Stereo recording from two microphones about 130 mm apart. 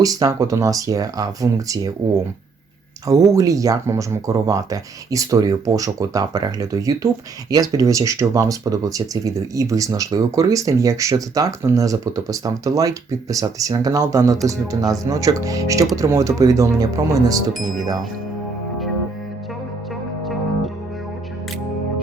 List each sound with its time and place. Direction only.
0.0 s speech: 25° right (ahead or behind)
3.1 s speech: 25° right (ahead or behind)
17.5 s speech: centre (ahead or behind)